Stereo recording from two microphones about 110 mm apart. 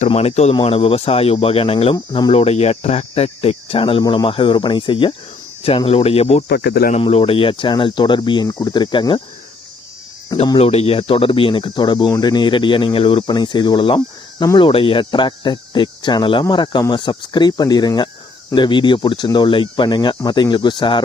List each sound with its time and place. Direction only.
0.1 s speech: 70° left (ahead or behind)
0.6 s speech: 60° left (ahead or behind)
2.3 s speech: 75° left (ahead or behind); by 5.1 s 50° left (ahead or behind)
5.6 s speech: 60° left (ahead or behind)
10.6 s speech: 65° left (ahead or behind); by 21.0 s 45° left (ahead or behind)